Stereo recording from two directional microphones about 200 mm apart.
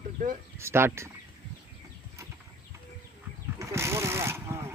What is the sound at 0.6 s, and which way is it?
Speech, 10° right (ahead or behind).